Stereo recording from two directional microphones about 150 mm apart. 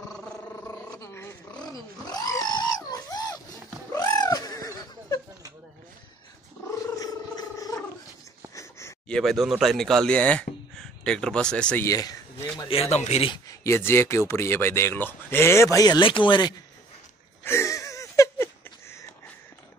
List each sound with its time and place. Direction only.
0.7 s dog: 20° left (ahead or behind)
1.6 s a sound: 25° left (ahead or behind)
6.7 s purr: 25° left (ahead or behind)
8.5 s a sound: 20° left (ahead or behind)
9.1 s speech: centre (ahead or behind)
11.8 s speech: 25° left (ahead or behind)
12.6 s speech: 40° left (ahead or behind)
13.3 s speech: 20° left (ahead or behind)
17.4 s a sound: 15° left (ahead or behind)